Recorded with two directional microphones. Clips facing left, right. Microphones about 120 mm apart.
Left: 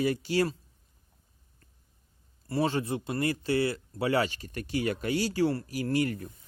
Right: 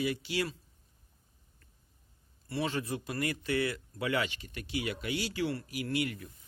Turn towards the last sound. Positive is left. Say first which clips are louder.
# left 5 dB
turn(degrees=40)  # may be behind; listen again after turning